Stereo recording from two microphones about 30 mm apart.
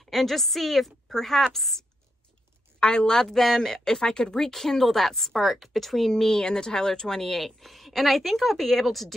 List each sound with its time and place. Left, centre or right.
0.0 s a woman's voice: centre
2.8 s a woman's voice: left
3.1 s speech: left
3.3 s a woman's voice: centre
6.1 s speech: centre